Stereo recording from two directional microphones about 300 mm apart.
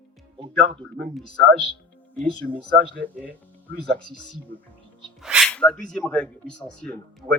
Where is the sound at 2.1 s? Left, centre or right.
Centre.